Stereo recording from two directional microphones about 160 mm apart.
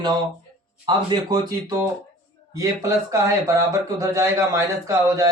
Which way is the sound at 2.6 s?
20° right (ahead or behind).